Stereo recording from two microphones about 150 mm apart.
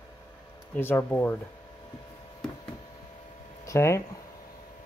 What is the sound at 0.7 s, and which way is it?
Speech, 15° left (ahead or behind).